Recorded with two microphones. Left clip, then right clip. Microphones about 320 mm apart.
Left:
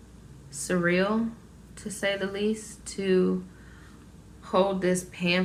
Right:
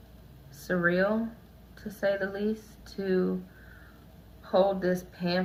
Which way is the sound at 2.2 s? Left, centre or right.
Centre.